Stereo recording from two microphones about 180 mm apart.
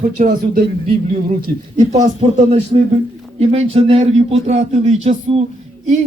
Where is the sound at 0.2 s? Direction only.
40° right (ahead or behind).